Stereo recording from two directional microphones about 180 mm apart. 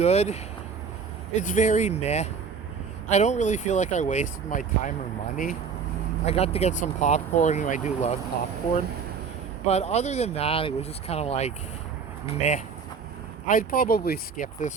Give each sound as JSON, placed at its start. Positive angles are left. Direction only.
{"t": 0.0, "sound": "speech", "side_deg": 35}
{"t": 6.2, "sound": "speech", "side_deg": 35}
{"t": 9.6, "sound": "speech", "side_deg": 35}
{"t": 13.5, "sound": "speech", "side_deg": 50}